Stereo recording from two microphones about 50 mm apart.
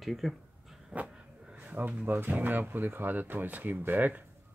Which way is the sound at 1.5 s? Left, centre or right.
Right.